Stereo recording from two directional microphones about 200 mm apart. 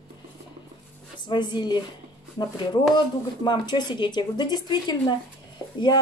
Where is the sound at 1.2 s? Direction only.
20° left (ahead or behind).